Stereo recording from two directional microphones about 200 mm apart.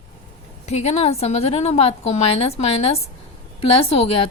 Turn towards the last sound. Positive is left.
turn(degrees=30)  # may be behind; listen again after turning